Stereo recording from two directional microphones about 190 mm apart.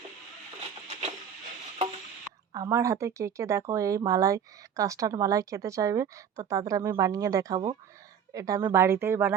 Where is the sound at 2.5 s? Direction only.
15° right (ahead or behind).